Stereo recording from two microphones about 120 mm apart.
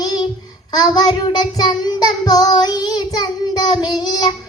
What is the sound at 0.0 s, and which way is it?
Child singing, 35° left (ahead or behind).